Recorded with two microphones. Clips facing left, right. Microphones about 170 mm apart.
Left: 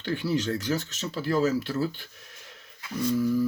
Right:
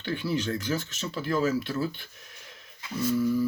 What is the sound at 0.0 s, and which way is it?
Speech, 40° left (ahead or behind).